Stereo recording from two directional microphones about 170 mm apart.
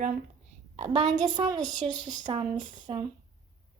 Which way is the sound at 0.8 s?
45° right (ahead or behind).